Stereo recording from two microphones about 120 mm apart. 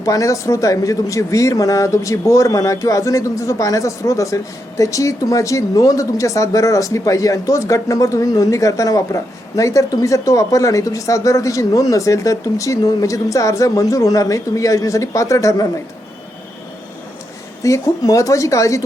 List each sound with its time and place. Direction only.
0.0 s speech: 30° left (ahead or behind)
17.6 s speech: 30° left (ahead or behind)